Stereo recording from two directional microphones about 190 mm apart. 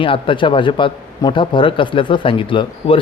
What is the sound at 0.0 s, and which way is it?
Speech, 25° left (ahead or behind).